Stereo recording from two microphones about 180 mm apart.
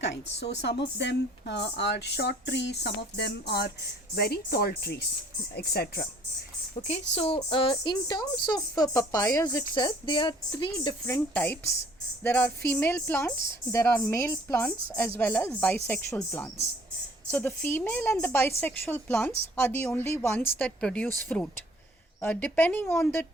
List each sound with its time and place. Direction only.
0.0 s speech: 75° left (ahead or behind); by 6.0 s 60° left (ahead or behind)
6.7 s speech: 35° left (ahead or behind)
11.0 s speech: 10° left (ahead or behind)